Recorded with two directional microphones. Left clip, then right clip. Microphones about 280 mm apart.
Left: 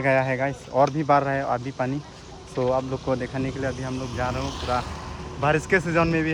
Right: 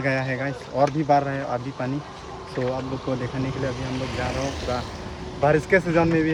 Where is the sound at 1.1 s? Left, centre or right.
Centre.